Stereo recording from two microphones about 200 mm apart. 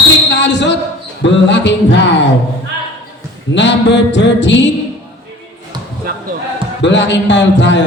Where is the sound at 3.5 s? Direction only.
65° left (ahead or behind).